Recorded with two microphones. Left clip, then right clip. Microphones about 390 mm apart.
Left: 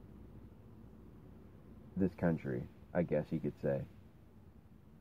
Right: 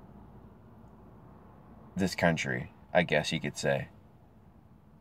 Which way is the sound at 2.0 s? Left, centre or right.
Centre.